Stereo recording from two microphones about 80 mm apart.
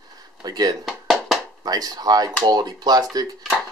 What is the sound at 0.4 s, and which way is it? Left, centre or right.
Speech, right.